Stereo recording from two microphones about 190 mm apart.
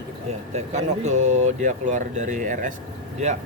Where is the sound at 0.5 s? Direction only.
35° right (ahead or behind).